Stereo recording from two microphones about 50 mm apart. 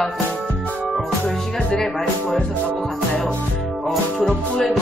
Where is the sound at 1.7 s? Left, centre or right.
Centre.